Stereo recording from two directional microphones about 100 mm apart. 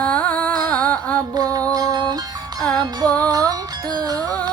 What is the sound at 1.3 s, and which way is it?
Music, 35° right (ahead or behind).